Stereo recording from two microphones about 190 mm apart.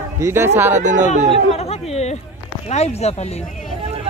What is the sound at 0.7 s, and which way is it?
Speech, 40° right (ahead or behind).